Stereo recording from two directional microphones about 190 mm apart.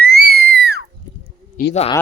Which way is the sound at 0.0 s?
55° right (ahead or behind).